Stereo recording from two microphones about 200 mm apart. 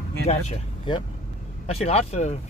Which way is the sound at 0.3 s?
30° left (ahead or behind).